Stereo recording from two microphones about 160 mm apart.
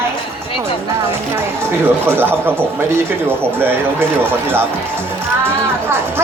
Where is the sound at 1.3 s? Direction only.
15° right (ahead or behind).